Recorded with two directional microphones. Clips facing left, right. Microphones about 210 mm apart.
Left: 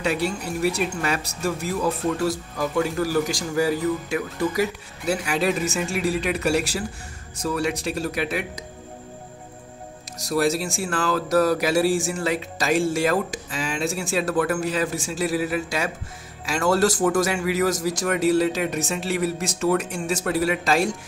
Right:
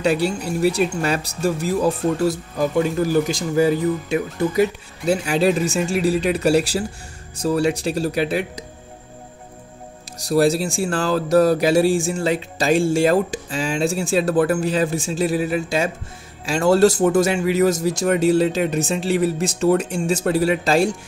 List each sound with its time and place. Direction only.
0.0 s speech: 30° right (ahead or behind)
10.1 s speech: 30° right (ahead or behind)